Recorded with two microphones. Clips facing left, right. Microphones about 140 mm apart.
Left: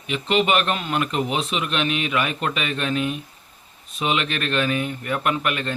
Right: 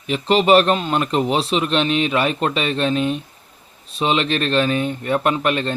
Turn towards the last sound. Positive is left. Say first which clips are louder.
# right 5 dB
turn(degrees=-30)  # may be behind; listen again after turning